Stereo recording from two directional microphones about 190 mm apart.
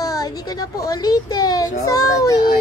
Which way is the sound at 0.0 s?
20° left (ahead or behind).